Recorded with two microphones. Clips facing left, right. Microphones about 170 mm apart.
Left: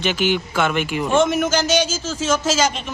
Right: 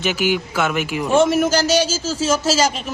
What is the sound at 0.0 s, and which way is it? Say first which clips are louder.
Speech: even; 5° right (ahead or behind).